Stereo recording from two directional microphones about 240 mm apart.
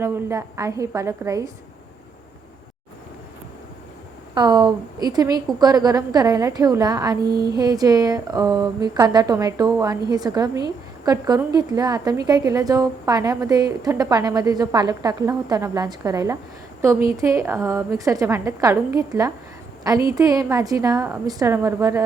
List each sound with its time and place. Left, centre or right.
0.0 s a woman's voice: centre
4.4 s a woman's voice: centre
7.2 s speech: right
7.5 s a woman's voice: centre